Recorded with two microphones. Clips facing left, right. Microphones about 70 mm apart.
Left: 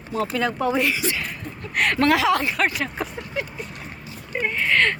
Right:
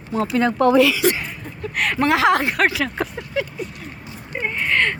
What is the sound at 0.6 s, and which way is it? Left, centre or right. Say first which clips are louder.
Speech: right 10 dB; right.